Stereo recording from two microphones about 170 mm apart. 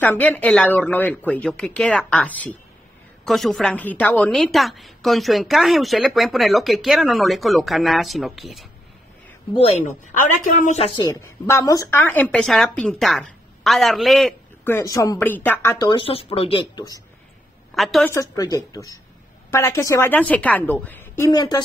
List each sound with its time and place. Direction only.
0.0 s a woman's voice: 10° left (ahead or behind)
9.5 s speech: 35° left (ahead or behind)
10.9 s a woman's voice: 25° left (ahead or behind); by 14.3 s centre (ahead or behind)
14.6 s speech: 15° left (ahead or behind)
17.7 s a woman's voice: centre (ahead or behind)
18.1 s speech: 20° left (ahead or behind)